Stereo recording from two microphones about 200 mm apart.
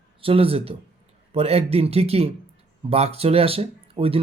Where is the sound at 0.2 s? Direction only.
30° right (ahead or behind).